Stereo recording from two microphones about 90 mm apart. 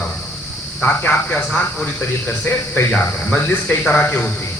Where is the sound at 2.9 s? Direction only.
10° left (ahead or behind).